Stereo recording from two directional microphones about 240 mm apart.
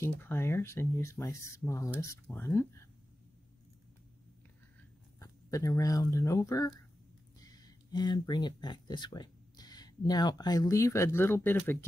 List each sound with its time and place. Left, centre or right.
0.0 s speech: centre
5.2 s speech: centre